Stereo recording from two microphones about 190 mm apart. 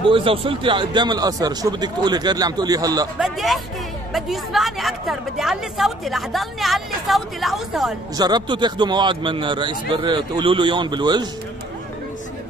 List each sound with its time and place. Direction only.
0.1 s a man's voice: 30° right (ahead or behind)
3.2 s a woman's voice: centre (ahead or behind)
8.2 s a man's voice: 20° right (ahead or behind)